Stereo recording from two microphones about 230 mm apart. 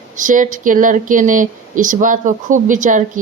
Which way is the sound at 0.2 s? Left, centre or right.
Right.